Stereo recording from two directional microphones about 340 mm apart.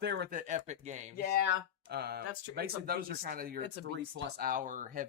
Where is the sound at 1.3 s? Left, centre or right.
Left.